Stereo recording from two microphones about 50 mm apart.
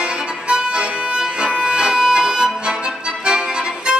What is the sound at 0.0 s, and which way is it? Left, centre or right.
Music, centre.